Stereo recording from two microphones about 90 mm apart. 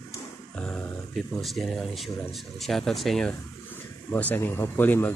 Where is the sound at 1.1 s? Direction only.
Centre (ahead or behind).